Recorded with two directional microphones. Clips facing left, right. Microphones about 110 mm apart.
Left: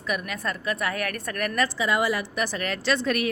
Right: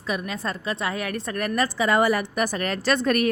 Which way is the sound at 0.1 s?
30° right (ahead or behind).